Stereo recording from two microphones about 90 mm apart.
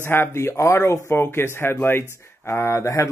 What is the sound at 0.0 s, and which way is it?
Speech, 25° left (ahead or behind).